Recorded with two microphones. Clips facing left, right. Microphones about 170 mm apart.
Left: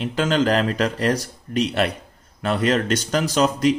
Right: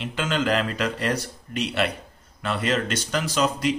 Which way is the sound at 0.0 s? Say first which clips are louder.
Left 5 dB; 40° left (ahead or behind).